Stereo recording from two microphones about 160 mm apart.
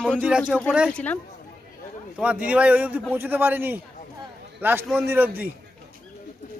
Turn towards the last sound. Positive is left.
turn(degrees=-10)  # may be behind; listen again after turning